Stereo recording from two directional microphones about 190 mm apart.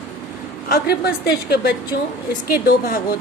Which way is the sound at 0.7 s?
55° left (ahead or behind).